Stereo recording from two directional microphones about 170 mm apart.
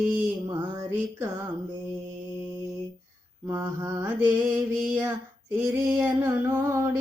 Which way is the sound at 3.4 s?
15° right (ahead or behind).